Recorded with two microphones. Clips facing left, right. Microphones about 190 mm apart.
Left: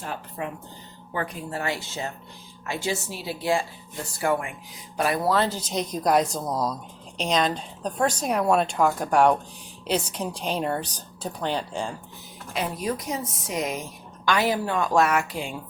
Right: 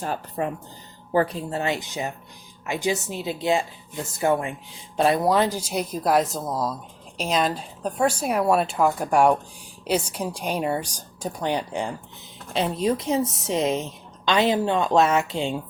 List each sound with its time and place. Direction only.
0.0 s a woman's voice: 40° right (ahead or behind); by 15.5 s 25° right (ahead or behind)